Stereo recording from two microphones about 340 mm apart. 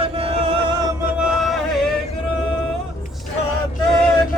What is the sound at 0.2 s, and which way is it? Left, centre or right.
Chant, centre.